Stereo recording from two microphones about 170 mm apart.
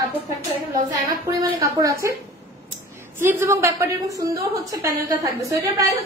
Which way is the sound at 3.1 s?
15° right (ahead or behind).